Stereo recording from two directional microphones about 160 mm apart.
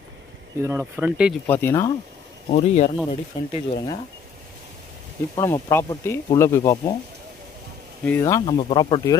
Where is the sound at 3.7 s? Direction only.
30° left (ahead or behind).